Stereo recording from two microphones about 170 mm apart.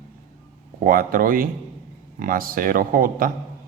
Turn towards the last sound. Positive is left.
turn(degrees=-55)  # may be behind; listen again after turning